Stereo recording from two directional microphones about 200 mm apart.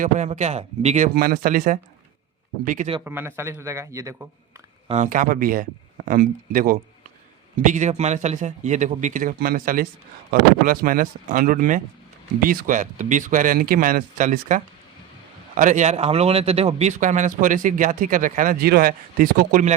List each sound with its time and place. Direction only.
0.0 s speech: 35° right (ahead or behind)
1.1 s speech: 45° right (ahead or behind)
3.0 s speech: 10° right (ahead or behind)
4.9 s speech: 40° right (ahead or behind)